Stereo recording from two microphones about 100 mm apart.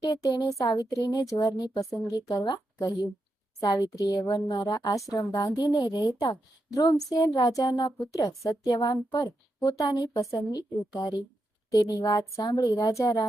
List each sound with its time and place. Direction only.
0.0 s a woman's voice: 40° left (ahead or behind)